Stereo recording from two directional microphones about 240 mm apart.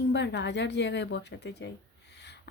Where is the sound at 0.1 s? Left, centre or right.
Left.